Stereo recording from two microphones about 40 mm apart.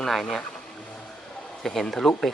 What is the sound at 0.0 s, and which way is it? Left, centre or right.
Speech, centre.